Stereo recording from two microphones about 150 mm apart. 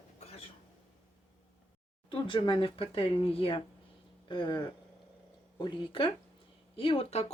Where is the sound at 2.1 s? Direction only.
35° left (ahead or behind).